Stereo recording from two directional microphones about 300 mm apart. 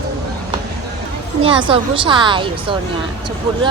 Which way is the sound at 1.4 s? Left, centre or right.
Centre.